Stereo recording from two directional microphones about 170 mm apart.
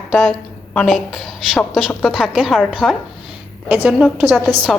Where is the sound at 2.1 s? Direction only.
5° right (ahead or behind).